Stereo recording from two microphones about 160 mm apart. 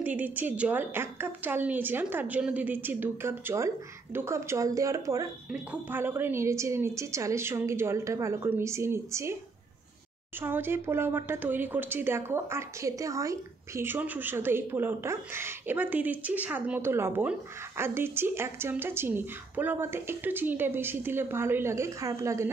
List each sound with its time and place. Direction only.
0.0 s speech: 10° right (ahead or behind)
10.4 s speech: 15° right (ahead or behind)